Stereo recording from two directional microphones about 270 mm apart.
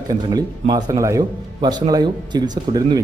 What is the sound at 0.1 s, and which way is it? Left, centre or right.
A man's voice, centre.